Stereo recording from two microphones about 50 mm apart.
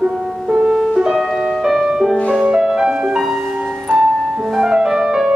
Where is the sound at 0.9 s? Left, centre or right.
Centre.